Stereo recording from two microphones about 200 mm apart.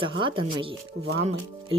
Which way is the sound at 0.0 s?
25° right (ahead or behind).